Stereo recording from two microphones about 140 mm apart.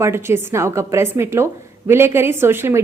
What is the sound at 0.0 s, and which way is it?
A woman's voice, 20° right (ahead or behind).